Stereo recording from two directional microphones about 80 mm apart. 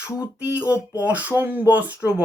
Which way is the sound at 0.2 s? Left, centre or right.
Centre.